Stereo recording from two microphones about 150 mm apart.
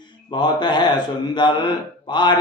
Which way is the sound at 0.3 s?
30° left (ahead or behind).